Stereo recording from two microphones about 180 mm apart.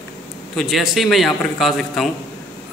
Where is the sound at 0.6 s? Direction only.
Centre (ahead or behind).